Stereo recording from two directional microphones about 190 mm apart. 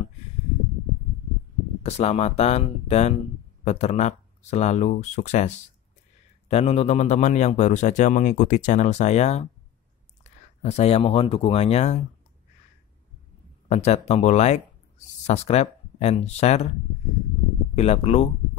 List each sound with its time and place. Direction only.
1.8 s a man's voice: 35° left (ahead or behind)
6.5 s a man's voice: 35° left (ahead or behind)
13.7 s a man's voice: 35° left (ahead or behind)
17.7 s a man's voice: 35° left (ahead or behind)